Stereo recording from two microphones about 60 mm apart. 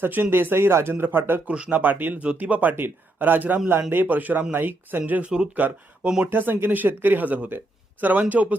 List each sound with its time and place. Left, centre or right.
0.0 s speech: right
1.5 s a man's voice: centre; by 4.0 s right
4.0 s a man's voice: right